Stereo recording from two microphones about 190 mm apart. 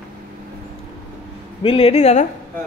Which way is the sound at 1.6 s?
30° left (ahead or behind).